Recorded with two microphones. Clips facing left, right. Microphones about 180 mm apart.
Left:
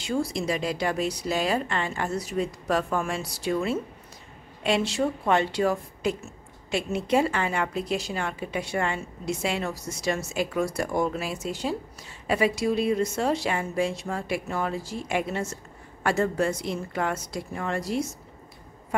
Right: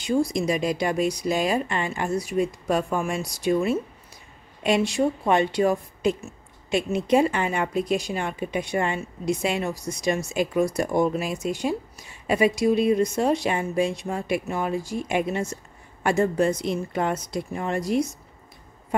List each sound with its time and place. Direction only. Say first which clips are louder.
0.0 s a woman's voice: right 4 dB; 15° right (ahead or behind)